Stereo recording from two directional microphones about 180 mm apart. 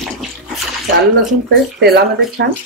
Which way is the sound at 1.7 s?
65° right (ahead or behind).